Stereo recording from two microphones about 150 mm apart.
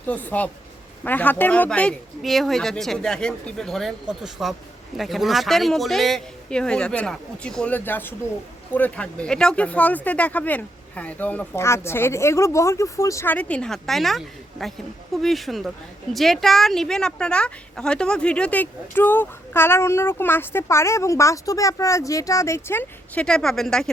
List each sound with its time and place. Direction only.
0.1 s a woman's voice: 10° left (ahead or behind)